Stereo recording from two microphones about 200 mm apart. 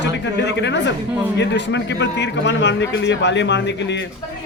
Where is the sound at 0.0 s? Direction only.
60° left (ahead or behind).